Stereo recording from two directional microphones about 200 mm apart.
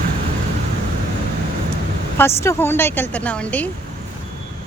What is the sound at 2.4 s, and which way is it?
A woman's voice, 10° left (ahead or behind).